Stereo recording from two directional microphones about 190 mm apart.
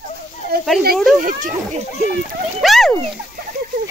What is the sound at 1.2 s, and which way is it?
Speech, 45° right (ahead or behind).